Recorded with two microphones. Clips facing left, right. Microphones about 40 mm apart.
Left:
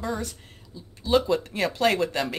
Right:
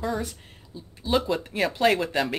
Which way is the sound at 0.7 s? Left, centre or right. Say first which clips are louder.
Right 2 dB; right.